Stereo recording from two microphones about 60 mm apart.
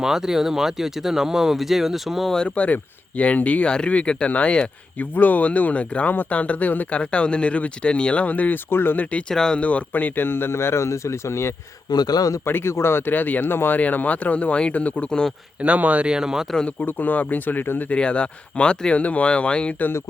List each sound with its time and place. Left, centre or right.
0.0 s speech: centre
2.6 s speech: left
9.3 s speech: centre; by 11.5 s left
12.0 s a man's voice: left
12.5 s speech: left; by 15.3 s centre
15.6 s speech: right
16.8 s speech: left
17.9 s speech: centre